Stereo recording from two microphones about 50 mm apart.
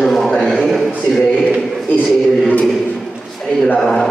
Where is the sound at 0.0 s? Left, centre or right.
Centre.